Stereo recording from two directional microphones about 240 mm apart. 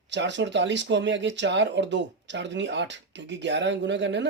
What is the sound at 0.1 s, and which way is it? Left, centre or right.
Speech, right.